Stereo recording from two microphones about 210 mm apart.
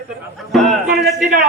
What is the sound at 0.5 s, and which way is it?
Speech, centre (ahead or behind).